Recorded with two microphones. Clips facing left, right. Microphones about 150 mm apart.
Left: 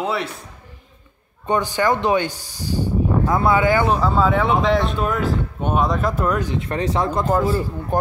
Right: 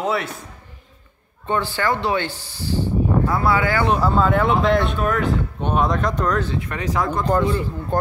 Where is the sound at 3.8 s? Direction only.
Centre (ahead or behind).